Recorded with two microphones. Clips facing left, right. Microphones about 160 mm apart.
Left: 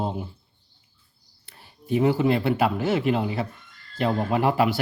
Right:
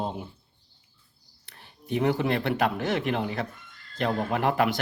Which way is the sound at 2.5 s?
5° left (ahead or behind).